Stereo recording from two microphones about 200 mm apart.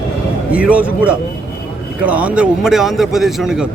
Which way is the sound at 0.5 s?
5° right (ahead or behind).